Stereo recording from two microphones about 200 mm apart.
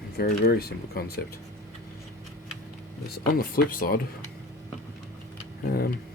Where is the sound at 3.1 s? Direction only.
50° left (ahead or behind).